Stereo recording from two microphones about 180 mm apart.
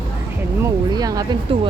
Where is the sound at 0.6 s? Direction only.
20° right (ahead or behind).